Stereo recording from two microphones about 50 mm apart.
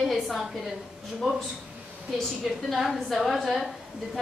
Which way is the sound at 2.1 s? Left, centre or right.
Centre.